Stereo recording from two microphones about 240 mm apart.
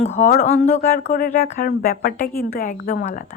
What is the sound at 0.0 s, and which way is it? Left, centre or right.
A woman's voice, left.